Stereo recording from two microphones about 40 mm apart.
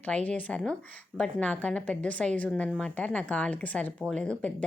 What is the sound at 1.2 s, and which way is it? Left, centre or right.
A woman's voice, left.